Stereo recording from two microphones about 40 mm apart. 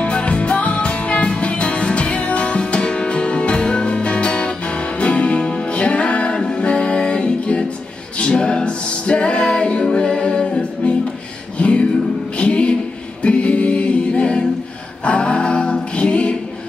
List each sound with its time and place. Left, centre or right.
0.0 s music: left